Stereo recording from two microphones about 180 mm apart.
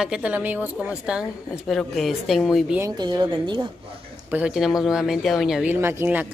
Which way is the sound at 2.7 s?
20° right (ahead or behind).